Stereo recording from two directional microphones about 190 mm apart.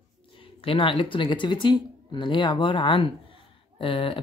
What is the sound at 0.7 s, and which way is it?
Speech, 25° left (ahead or behind).